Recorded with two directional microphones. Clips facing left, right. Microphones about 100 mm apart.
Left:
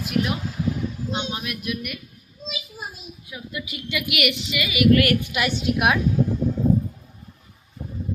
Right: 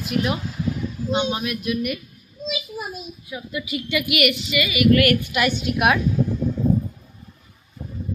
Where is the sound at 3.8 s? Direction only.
10° left (ahead or behind).